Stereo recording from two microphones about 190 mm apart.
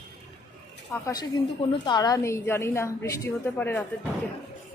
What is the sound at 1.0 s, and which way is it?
A woman's voice, 20° left (ahead or behind).